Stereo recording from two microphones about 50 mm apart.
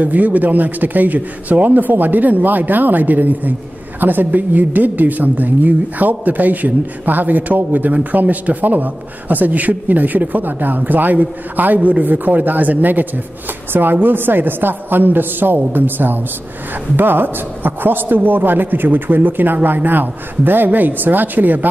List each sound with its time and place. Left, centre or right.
0.0 s a woman's voice: right